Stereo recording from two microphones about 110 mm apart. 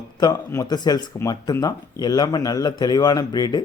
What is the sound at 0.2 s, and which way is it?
A man's voice, 35° left (ahead or behind).